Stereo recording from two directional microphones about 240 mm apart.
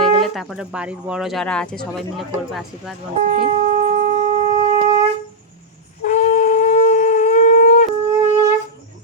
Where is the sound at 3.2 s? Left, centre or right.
Right.